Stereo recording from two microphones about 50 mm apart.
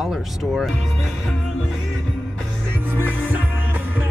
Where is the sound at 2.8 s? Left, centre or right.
Right.